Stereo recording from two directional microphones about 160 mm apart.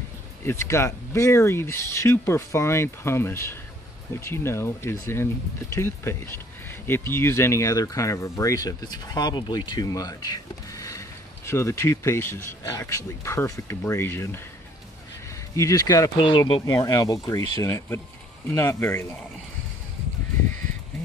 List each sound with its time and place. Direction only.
0.4 s speech: 15° left (ahead or behind)
15.5 s speech: 20° left (ahead or behind)